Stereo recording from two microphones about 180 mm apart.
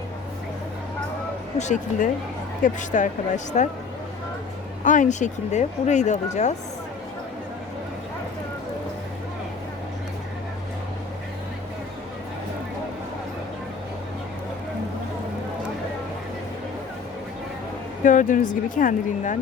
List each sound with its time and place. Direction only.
1.5 s speech: 40° left (ahead or behind)
4.8 s speech: 45° left (ahead or behind)
18.0 s speech: 45° left (ahead or behind)